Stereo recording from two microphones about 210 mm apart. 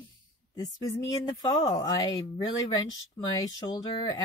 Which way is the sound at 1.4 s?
20° left (ahead or behind).